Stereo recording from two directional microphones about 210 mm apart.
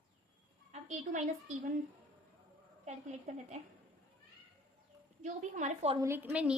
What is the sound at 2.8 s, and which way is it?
Speech, 35° right (ahead or behind).